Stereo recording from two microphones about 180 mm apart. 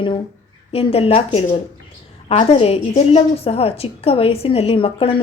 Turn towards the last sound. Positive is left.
turn(degrees=30)  # may be behind; listen again after turning